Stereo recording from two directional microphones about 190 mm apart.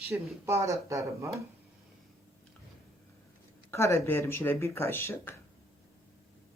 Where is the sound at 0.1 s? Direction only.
5° right (ahead or behind).